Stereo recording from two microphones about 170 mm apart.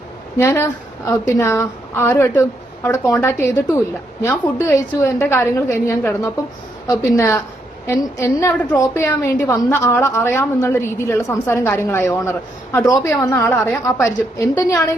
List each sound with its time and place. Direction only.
0.3 s a woman's voice: 15° left (ahead or behind)